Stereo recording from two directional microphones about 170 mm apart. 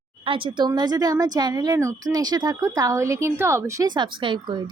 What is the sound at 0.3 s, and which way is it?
Speech, 30° right (ahead or behind).